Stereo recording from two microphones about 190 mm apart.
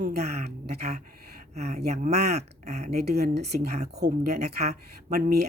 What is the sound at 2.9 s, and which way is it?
Speech, 60° right (ahead or behind).